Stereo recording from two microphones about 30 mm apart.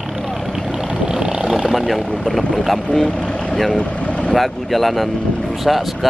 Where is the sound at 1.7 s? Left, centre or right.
Centre.